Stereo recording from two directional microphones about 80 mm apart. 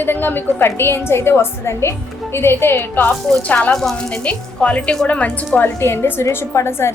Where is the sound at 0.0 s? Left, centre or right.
Left.